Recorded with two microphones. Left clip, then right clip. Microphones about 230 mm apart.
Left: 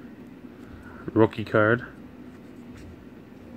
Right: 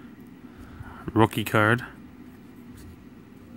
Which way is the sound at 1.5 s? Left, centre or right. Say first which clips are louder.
Left 1 dB; right.